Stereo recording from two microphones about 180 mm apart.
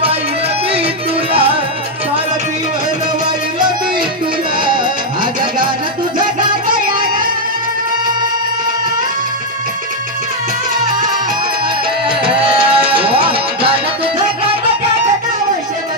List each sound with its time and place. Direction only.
4.6 s music: 25° right (ahead or behind)
6.1 s music: 25° right (ahead or behind)
6.7 s music: 50° right (ahead or behind)
12.5 s music: 30° right (ahead or behind)